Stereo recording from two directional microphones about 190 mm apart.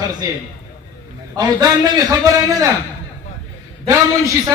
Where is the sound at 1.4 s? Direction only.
20° right (ahead or behind).